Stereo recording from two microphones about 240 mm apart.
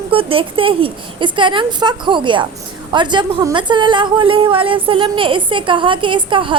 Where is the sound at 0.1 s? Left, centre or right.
Right.